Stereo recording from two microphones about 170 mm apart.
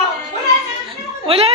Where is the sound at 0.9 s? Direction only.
35° right (ahead or behind).